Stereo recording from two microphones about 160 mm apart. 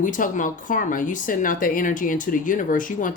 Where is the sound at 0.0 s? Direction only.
55° left (ahead or behind).